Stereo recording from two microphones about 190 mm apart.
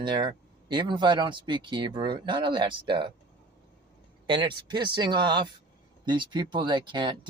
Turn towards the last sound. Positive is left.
turn(degrees=-25)  # may be behind; listen again after turning